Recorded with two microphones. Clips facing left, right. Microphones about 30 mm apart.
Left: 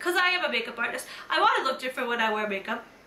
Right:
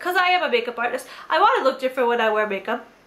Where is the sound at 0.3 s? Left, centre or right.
Centre.